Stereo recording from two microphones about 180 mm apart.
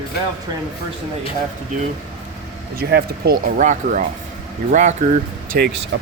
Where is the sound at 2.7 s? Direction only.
60° right (ahead or behind); by 4.9 s 40° right (ahead or behind).